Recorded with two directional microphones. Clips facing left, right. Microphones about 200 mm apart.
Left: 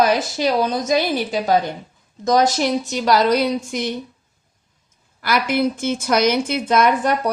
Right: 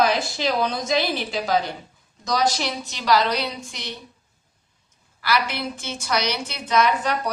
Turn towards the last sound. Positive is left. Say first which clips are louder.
# left 5 dB
turn(degrees=50)  # may be behind; listen again after turning